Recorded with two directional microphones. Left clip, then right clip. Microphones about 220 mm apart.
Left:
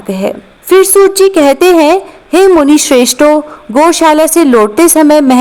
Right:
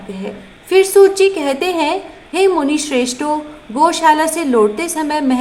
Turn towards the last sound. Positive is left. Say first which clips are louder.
# left 13 dB
turn(degrees=45)  # may be behind; listen again after turning